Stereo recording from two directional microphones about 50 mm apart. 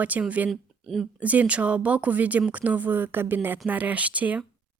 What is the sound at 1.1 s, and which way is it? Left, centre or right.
Speech, right.